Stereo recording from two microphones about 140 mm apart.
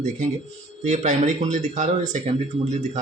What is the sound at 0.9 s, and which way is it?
Speech, 55° right (ahead or behind).